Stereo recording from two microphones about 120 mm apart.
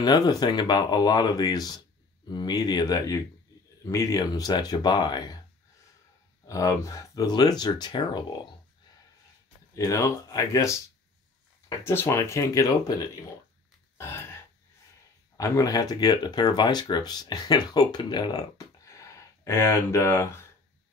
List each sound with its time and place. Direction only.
0.0 s speech: 35° left (ahead or behind)
6.4 s speech: 25° left (ahead or behind)
9.8 s speech: 25° left (ahead or behind)
11.8 s speech: 20° left (ahead or behind)
15.3 s speech: 30° left (ahead or behind)
18.9 s a sound: 25° left (ahead or behind)